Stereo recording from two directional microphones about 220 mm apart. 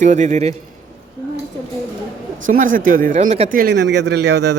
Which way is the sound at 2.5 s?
35° right (ahead or behind).